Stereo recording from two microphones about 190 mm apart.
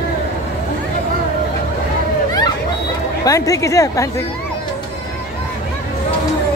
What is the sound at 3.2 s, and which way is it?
Speech, 15° left (ahead or behind).